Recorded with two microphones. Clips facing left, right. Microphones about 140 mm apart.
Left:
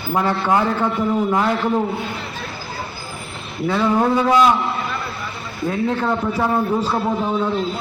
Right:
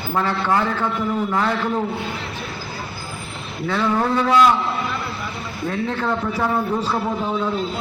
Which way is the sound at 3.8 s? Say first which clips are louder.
Left 3 dB; 15° left (ahead or behind).